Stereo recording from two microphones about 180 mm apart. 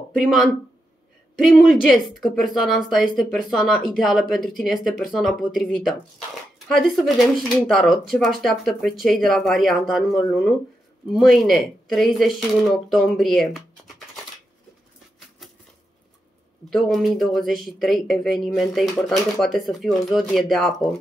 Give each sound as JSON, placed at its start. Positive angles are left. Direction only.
{"t": 0.2, "sound": "speech", "side_deg": 0}
{"t": 1.5, "sound": "speech", "side_deg": 0}
{"t": 16.7, "sound": "speech", "side_deg": 0}